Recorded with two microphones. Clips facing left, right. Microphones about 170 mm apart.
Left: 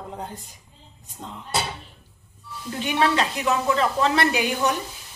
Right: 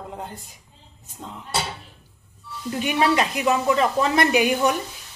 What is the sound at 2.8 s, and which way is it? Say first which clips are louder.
A woman's voice: right 1 dB; 15° right (ahead or behind).